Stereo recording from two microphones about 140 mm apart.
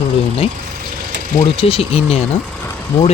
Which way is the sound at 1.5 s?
40° left (ahead or behind).